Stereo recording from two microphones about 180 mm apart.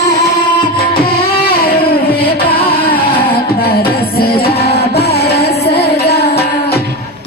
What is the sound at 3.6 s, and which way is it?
Music, 60° left (ahead or behind).